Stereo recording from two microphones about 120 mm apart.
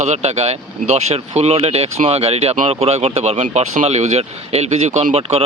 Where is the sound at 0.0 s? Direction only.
70° right (ahead or behind).